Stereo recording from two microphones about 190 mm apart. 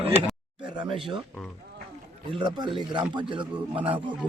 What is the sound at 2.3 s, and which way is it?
Speech, 25° right (ahead or behind).